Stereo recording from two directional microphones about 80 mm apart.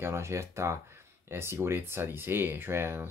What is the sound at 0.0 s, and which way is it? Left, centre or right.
Speech, right.